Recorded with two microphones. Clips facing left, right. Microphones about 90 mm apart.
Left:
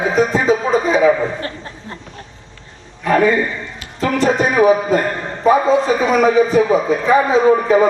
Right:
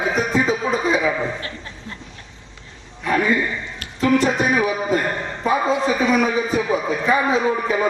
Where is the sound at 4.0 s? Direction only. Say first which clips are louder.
Left 2 dB; 40° left (ahead or behind).